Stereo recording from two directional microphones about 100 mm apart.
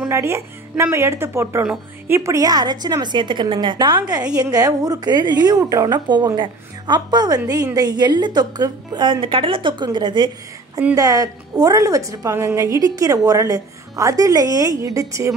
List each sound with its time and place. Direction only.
0.1 s a woman's voice: 25° right (ahead or behind); by 10.3 s 50° right (ahead or behind)
11.0 s a woman's voice: 35° right (ahead or behind)